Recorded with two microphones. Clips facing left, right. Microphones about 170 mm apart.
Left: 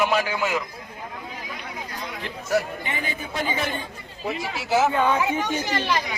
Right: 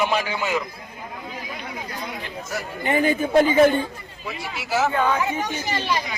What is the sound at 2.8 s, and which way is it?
Speech, 50° right (ahead or behind).